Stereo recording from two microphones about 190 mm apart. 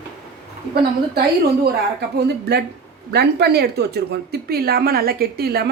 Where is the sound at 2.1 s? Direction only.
60° right (ahead or behind).